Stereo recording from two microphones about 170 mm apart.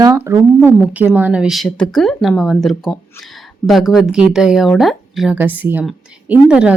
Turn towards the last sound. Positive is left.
turn(degrees=-5)  # may be behind; listen again after turning